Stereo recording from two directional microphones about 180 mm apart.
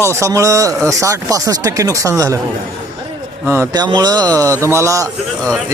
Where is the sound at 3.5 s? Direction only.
15° right (ahead or behind).